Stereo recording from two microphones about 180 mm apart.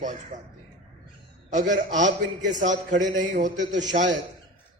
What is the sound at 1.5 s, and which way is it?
A man's voice, 45° right (ahead or behind).